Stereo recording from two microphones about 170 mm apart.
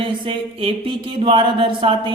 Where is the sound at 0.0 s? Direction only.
30° right (ahead or behind).